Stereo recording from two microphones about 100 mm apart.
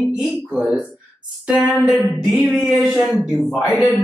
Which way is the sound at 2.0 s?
Centre (ahead or behind).